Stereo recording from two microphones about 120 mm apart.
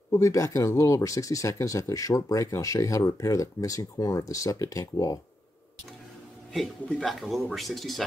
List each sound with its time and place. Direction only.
0.1 s speech: 25° left (ahead or behind)
7.0 s speech: centre (ahead or behind)